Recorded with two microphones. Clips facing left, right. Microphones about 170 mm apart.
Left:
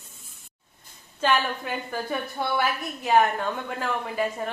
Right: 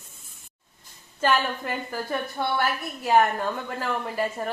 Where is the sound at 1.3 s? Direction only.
5° right (ahead or behind).